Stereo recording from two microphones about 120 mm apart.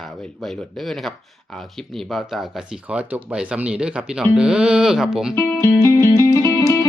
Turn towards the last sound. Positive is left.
turn(degrees=25)  # may be behind; listen again after turning